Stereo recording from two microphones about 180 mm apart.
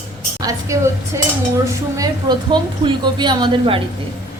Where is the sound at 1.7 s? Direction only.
20° right (ahead or behind).